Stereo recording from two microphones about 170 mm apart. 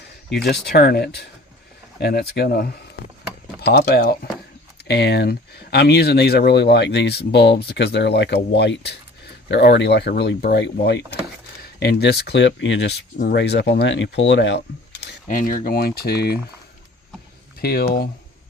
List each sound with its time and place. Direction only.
0.4 s speech: 70° left (ahead or behind); by 14.6 s 90° left
15.3 s speech: 55° left (ahead or behind); by 16.4 s 70° left (ahead or behind)
17.6 s speech: 65° left (ahead or behind)